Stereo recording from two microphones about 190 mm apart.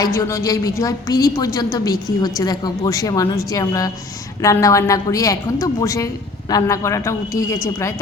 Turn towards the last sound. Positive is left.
turn(degrees=15)  # may be behind; listen again after turning